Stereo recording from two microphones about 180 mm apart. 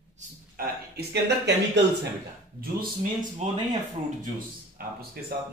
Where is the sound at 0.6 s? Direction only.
70° right (ahead or behind).